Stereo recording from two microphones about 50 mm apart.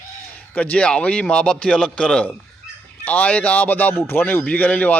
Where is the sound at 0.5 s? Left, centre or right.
Left.